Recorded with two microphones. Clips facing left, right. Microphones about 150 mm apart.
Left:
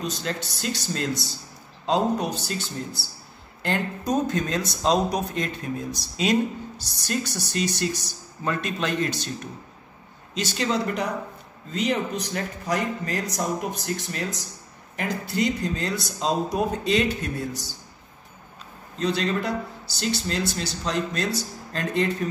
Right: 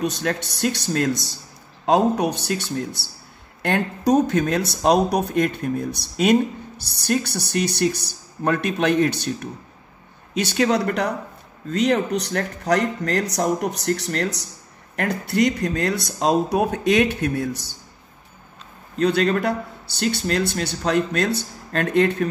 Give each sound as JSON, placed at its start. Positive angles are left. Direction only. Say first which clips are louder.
{"t": 0.0, "sound": "a man's voice", "louder": "right 6 dB", "side_deg": -65}
{"t": 18.9, "sound": "speech", "louder": "right 6 dB", "side_deg": -60}